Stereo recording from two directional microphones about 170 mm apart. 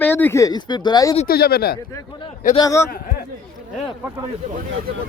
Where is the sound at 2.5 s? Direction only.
20° left (ahead or behind).